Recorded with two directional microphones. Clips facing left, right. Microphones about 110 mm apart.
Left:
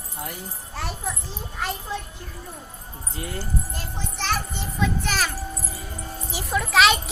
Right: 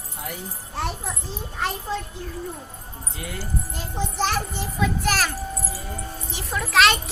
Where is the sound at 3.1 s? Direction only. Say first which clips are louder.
Left 2 dB; 30° left (ahead or behind).